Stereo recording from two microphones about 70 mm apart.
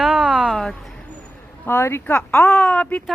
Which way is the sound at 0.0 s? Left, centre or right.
Centre.